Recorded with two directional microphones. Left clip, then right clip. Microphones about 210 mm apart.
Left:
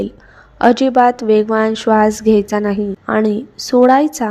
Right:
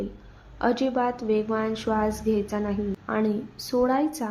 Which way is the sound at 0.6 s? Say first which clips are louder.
Left 14 dB; 35° left (ahead or behind).